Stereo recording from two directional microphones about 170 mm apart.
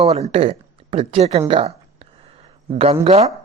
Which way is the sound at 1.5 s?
35° right (ahead or behind).